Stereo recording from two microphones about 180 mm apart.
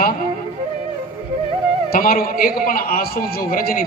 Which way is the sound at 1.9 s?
50° left (ahead or behind).